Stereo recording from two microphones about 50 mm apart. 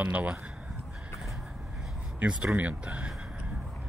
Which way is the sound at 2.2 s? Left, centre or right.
Right.